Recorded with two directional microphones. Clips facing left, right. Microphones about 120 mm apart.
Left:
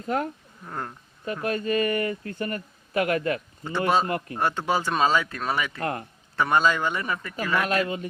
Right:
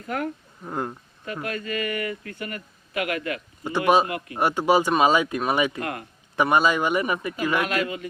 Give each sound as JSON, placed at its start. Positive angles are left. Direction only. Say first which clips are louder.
{"t": 0.6, "sound": "speech", "louder": "right 5 dB", "side_deg": -15}
{"t": 1.2, "sound": "speech", "louder": "left 3 dB", "side_deg": 30}
{"t": 3.6, "sound": "speech", "louder": "right 4 dB", "side_deg": -15}
{"t": 5.8, "sound": "speech", "louder": "left 2 dB", "side_deg": 30}
{"t": 6.3, "sound": "speech", "louder": "right 2 dB", "side_deg": -15}
{"t": 7.7, "sound": "speech", "louder": "left 1 dB", "side_deg": 30}